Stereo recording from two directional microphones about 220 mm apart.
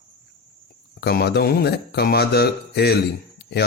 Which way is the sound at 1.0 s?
50° left (ahead or behind).